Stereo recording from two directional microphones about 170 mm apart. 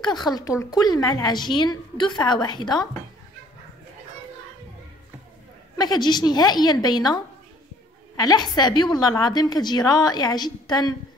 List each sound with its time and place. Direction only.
0.0 s a woman's voice: 25° left (ahead or behind)
5.8 s a woman's voice: 25° left (ahead or behind)
8.2 s a woman's voice: 25° left (ahead or behind)